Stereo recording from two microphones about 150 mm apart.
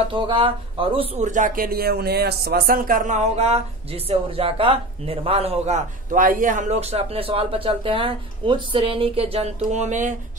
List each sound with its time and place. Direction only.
0.1 s speech: 35° right (ahead or behind)
1.2 s speech: 60° right (ahead or behind); by 5.8 s 40° right (ahead or behind)
6.1 s speech: 60° right (ahead or behind)